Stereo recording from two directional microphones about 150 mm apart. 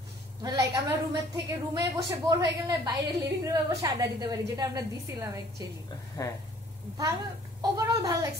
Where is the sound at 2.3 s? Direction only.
25° right (ahead or behind).